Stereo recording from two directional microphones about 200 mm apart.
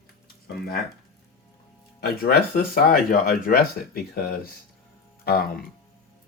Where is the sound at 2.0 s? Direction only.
50° left (ahead or behind).